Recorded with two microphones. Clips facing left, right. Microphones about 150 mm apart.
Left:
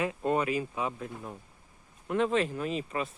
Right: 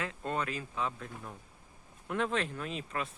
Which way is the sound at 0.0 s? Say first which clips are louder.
Left 7 dB; 15° left (ahead or behind).